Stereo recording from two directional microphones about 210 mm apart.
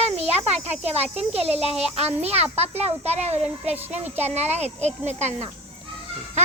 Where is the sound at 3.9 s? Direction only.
30° right (ahead or behind).